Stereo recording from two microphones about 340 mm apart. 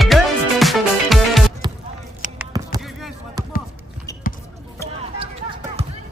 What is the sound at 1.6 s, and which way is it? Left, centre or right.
Basketball bounce, centre.